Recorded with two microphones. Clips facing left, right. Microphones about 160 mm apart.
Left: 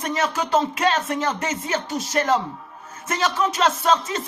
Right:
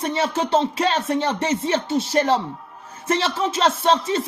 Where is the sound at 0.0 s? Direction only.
30° right (ahead or behind).